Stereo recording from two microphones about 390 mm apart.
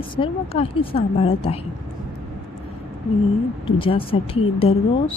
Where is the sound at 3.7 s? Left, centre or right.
Centre.